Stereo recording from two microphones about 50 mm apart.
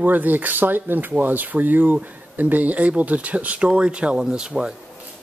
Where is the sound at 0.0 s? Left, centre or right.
Right; by 4.7 s centre.